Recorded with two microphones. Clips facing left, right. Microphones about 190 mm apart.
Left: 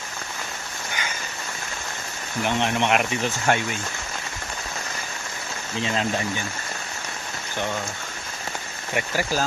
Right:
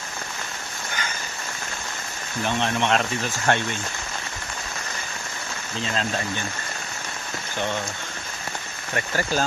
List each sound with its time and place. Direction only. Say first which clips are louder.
2.4 s speech: left 1 dB; 15° left (ahead or behind)
5.8 s speech: left 2 dB; 20° left (ahead or behind)
9.0 s speech: even; 5° left (ahead or behind)